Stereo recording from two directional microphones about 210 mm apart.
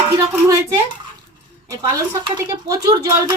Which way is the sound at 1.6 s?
15° right (ahead or behind).